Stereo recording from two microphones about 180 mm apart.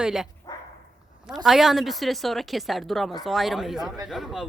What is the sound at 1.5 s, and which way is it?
A woman's voice, centre (ahead or behind).